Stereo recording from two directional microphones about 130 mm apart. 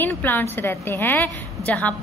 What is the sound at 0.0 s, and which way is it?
A woman's voice, 15° left (ahead or behind).